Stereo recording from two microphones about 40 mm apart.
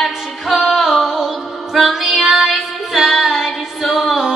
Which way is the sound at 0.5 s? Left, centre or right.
Centre.